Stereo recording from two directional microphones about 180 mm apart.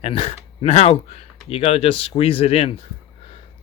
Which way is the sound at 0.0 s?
35° left (ahead or behind).